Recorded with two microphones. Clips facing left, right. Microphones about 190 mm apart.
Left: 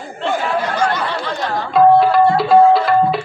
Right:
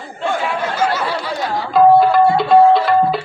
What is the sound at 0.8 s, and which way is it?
Tabla, 10° right (ahead or behind).